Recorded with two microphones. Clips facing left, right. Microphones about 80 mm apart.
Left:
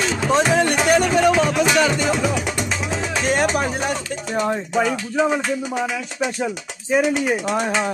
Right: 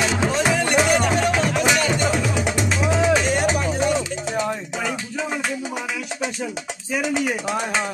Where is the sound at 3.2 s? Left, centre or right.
Left.